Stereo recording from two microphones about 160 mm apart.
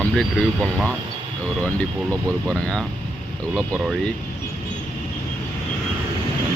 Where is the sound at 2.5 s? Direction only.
5° left (ahead or behind).